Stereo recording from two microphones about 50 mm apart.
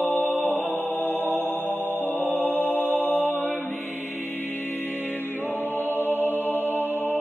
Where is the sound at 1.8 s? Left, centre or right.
Right.